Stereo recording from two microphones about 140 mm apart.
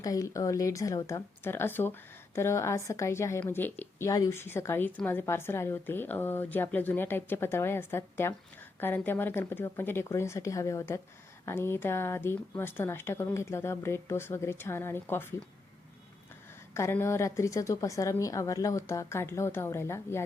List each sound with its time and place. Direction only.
0.0 s a woman's voice: 25° left (ahead or behind)
16.7 s a woman's voice: 20° left (ahead or behind)